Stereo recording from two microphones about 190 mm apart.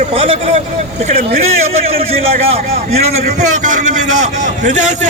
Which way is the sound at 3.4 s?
40° right (ahead or behind).